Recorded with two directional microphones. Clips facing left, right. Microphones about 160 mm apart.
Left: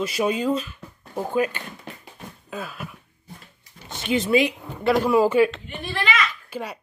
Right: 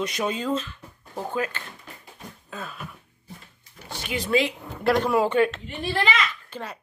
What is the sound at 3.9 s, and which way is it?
Speech, 20° left (ahead or behind).